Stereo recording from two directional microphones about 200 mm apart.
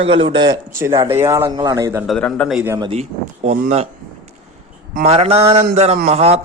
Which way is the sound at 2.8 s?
30° right (ahead or behind).